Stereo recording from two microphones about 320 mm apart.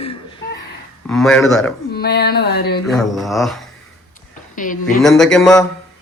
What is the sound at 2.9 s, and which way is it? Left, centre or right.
Mantra, centre.